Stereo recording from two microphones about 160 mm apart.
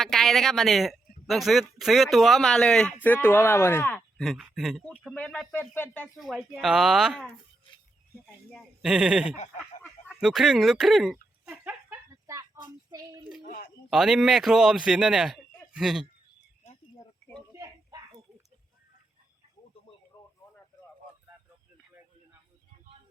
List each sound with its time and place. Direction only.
0.0 s a man's voice: centre (ahead or behind)
4.2 s speech: centre (ahead or behind)
6.1 s a man's voice: centre (ahead or behind)
8.4 s a man's voice: centre (ahead or behind)
9.8 s fowl: centre (ahead or behind)
12.1 s a sound: 20° right (ahead or behind)
13.5 s speech: 60° left (ahead or behind)
13.9 s a man's voice: centre (ahead or behind)
17.5 s a sound: 20° right (ahead or behind)
20.1 s a sound: 25° left (ahead or behind)